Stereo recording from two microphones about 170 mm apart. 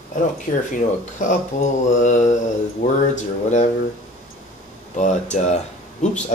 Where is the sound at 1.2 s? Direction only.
50° left (ahead or behind).